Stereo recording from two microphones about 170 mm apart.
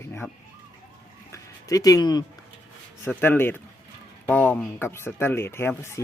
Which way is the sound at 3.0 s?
10° left (ahead or behind).